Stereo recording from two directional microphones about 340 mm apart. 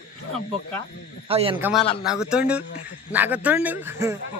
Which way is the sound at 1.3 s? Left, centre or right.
Centre.